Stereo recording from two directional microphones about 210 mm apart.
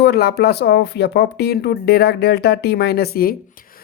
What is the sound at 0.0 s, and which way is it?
Speech, 50° left (ahead or behind).